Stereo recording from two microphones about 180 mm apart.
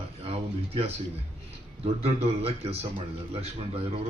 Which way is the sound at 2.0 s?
35° right (ahead or behind).